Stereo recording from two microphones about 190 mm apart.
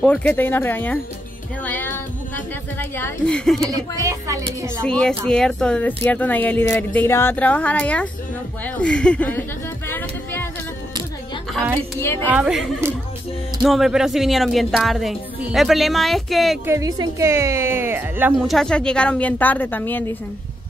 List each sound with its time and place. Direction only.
0.0 s speech: 5° left (ahead or behind)
3.7 s speech: 15° right (ahead or behind)
4.8 s speech: 5° left (ahead or behind)
9.8 s a sound: 10° left (ahead or behind)
12.3 s speech: 5° right (ahead or behind)
16.6 s speech: 15° right (ahead or behind)
18.5 s speech: 5° left (ahead or behind)